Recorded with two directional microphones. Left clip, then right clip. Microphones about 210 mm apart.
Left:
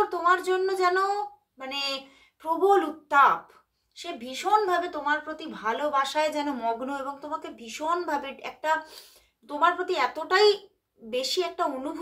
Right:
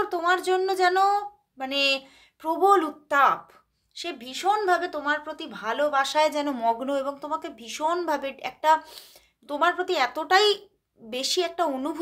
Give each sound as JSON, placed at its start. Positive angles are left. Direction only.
{"t": 0.1, "sound": "a woman's voice", "side_deg": -45}